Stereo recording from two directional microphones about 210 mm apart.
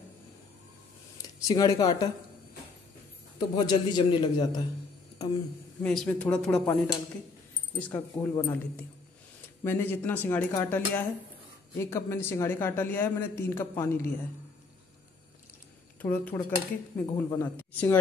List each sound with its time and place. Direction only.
1.1 s speech: 15° left (ahead or behind)
3.3 s a man's voice: 20° left (ahead or behind)
5.8 s speech: 5° left (ahead or behind)
7.9 s speech: 10° left (ahead or behind)
16.0 s speech: 5° left (ahead or behind)